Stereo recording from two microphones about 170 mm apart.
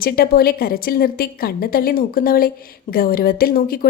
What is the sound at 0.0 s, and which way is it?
A woman's voice, 60° left (ahead or behind).